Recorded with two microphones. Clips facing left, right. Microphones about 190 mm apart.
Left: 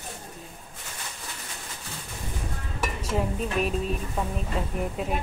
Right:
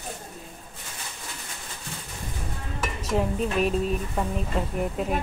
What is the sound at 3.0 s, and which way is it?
Dishes, 10° left (ahead or behind).